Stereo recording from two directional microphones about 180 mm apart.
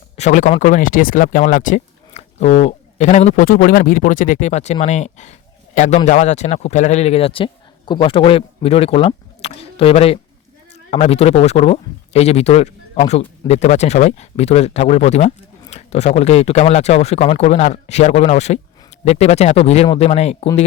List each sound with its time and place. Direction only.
0.2 s speech: 45° left (ahead or behind)